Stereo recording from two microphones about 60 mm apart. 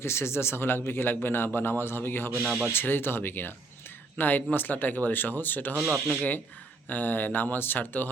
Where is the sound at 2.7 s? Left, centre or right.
Left.